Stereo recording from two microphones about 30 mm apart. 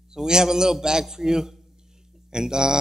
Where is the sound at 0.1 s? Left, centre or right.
Right.